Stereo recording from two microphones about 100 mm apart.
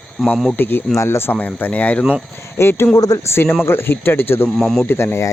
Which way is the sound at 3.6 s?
25° left (ahead or behind).